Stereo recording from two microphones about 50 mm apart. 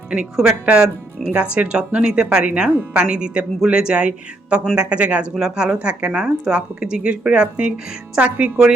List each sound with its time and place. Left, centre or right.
0.6 s speech: right